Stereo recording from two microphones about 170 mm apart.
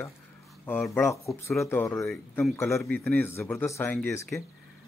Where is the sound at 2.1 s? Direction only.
Centre (ahead or behind).